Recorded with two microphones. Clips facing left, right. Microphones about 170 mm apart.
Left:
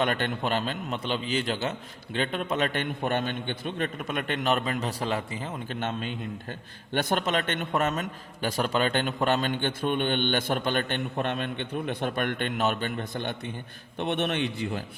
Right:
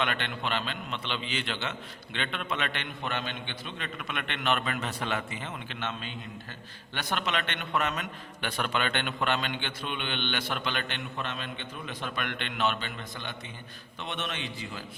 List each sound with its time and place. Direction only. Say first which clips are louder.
0.0 s a man's voice: left 5 dB; 40° left (ahead or behind); by 14.8 s 60° left (ahead or behind)